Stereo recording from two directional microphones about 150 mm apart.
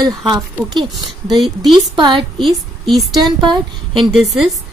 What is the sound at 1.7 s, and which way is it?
Speech, 30° right (ahead or behind).